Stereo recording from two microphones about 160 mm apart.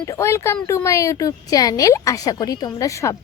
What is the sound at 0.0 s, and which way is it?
Speech, 20° left (ahead or behind).